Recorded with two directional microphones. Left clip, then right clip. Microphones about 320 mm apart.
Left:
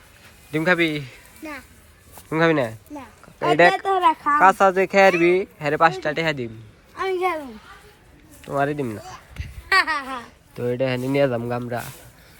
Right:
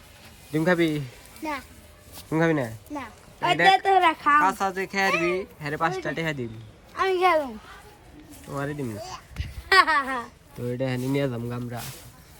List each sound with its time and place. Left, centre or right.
0.6 s speech: centre
1.4 s a child's voice: centre
6.9 s a sound: centre
8.4 s speech: centre
9.4 s a sound: right
10.6 s speech: centre